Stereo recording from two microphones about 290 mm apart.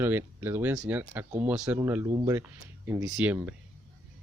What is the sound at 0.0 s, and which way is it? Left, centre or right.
Speech, centre.